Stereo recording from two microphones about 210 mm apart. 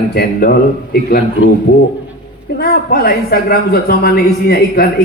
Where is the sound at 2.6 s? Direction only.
45° left (ahead or behind).